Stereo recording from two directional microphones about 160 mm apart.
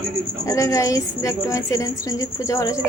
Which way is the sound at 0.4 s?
20° left (ahead or behind).